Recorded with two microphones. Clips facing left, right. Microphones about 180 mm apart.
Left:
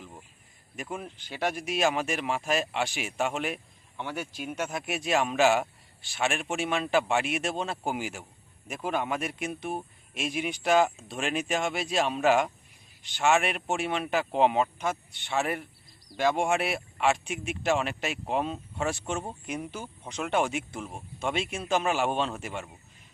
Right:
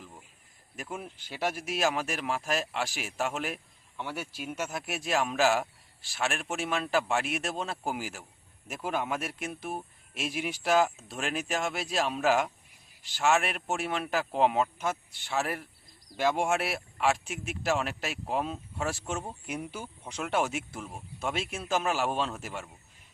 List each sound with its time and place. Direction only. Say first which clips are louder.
0.8 s speech: left 2 dB; 5° right (ahead or behind)